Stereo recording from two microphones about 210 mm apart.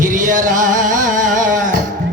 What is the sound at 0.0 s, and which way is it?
Music, 40° right (ahead or behind).